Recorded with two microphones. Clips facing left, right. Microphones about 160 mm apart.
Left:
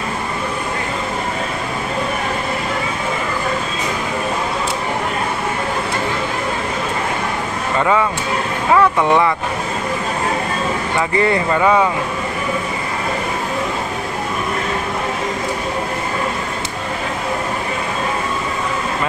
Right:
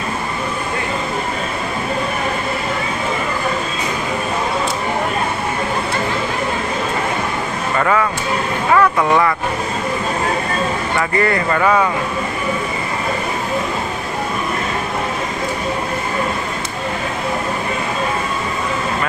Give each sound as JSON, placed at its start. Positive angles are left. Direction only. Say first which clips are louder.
{"t": 7.8, "sound": "speech", "louder": "left 1 dB", "side_deg": 15}
{"t": 11.0, "sound": "speech", "louder": "left 1 dB", "side_deg": 20}